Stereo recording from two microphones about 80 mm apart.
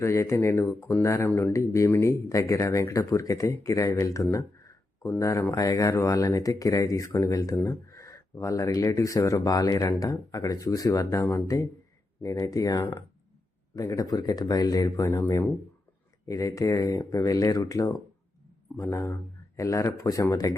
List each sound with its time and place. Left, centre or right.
0.0 s speech: left
1.3 s speech: left
1.5 s speech: left
15.0 s speech: left